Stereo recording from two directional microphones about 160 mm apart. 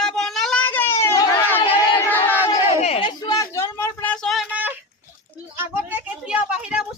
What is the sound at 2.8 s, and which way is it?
Chatter, 40° left (ahead or behind).